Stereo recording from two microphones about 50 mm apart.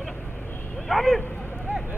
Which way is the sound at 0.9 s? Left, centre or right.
Centre.